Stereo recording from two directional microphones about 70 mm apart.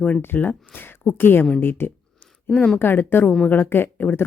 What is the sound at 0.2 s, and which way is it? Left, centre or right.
Speech, left.